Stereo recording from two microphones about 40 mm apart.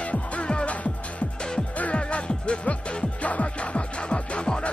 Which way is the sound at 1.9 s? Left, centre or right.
Left.